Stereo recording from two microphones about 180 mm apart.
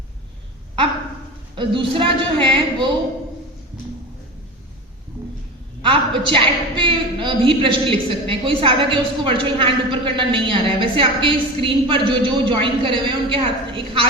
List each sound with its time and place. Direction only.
1.5 s a woman's voice: 30° right (ahead or behind)
5.8 s a woman's voice: 30° right (ahead or behind)